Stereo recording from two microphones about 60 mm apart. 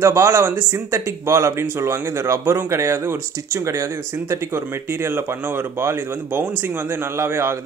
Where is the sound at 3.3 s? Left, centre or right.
Right.